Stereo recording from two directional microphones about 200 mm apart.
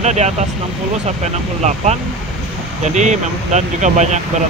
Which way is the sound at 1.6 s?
35° right (ahead or behind).